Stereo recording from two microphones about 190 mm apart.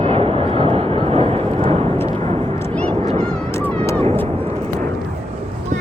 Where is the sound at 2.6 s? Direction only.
15° left (ahead or behind).